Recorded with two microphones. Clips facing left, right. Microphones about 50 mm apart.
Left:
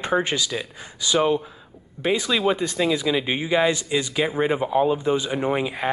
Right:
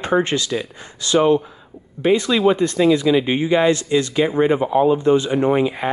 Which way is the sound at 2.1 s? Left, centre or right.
Right.